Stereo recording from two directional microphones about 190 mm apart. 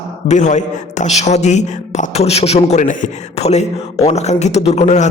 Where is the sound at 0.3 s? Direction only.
40° left (ahead or behind).